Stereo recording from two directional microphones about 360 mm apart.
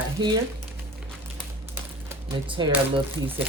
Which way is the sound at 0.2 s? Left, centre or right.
Centre.